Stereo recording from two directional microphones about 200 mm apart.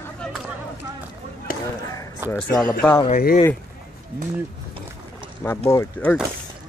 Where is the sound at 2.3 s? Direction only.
15° left (ahead or behind).